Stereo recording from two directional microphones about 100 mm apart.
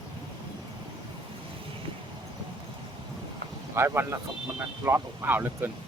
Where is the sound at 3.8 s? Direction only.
25° right (ahead or behind).